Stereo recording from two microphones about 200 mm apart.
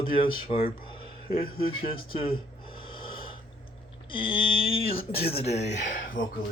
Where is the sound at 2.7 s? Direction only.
25° left (ahead or behind).